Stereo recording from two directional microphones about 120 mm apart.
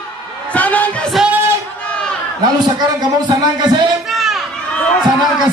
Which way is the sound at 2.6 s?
35° right (ahead or behind).